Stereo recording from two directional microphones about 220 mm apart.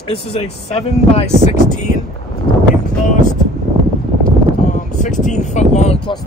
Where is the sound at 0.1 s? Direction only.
25° left (ahead or behind).